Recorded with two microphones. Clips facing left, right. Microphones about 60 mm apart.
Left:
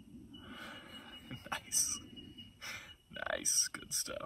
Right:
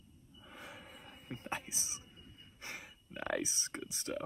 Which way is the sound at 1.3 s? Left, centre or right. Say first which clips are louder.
Right 2 dB; right.